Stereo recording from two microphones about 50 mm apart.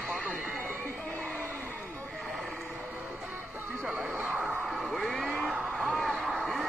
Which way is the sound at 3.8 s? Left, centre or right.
Centre.